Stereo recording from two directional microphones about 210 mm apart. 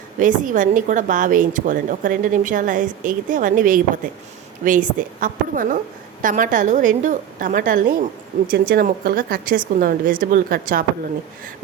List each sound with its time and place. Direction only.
0.2 s a woman's voice: 40° right (ahead or behind)